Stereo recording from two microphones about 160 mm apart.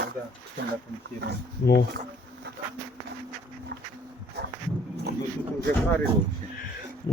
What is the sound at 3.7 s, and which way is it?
Speech, 90° right.